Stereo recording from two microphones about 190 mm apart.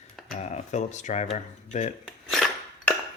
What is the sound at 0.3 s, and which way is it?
Speech, 40° left (ahead or behind).